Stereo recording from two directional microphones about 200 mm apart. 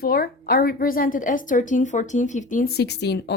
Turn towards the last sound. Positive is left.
turn(degrees=55)  # may be behind; listen again after turning